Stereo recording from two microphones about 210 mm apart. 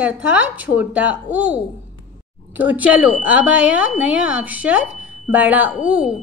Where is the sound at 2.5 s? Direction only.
5° right (ahead or behind).